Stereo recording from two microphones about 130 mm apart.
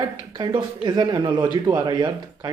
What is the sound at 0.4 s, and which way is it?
Speech, 35° right (ahead or behind).